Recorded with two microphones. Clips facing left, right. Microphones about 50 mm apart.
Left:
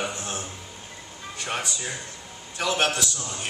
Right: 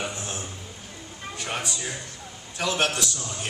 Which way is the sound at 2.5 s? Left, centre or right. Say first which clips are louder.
Left 1 dB; centre.